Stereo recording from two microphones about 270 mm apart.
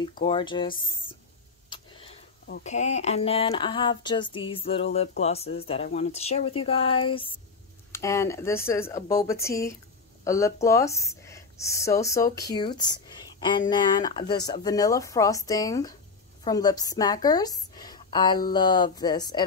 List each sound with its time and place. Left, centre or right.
0.2 s a woman's voice: centre
1.7 s a sound: centre
2.4 s a woman's voice: left; by 19.4 s centre